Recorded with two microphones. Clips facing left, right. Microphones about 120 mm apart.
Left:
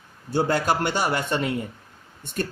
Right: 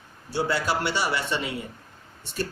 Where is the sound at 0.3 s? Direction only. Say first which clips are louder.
Left 4 dB; 50° left (ahead or behind).